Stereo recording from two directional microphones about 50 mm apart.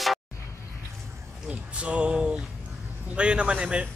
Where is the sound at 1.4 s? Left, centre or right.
Right.